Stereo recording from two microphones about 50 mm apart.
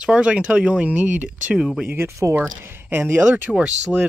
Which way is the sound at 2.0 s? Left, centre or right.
Right.